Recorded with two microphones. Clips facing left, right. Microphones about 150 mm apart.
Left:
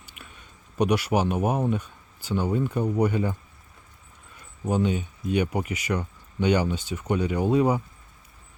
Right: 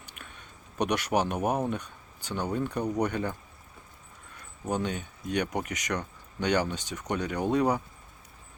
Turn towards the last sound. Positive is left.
turn(degrees=5)  # may be behind; listen again after turning